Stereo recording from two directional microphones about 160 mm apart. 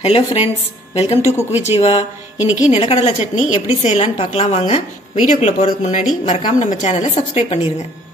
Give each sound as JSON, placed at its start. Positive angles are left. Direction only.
{"t": 0.0, "sound": "a woman's voice", "side_deg": 35}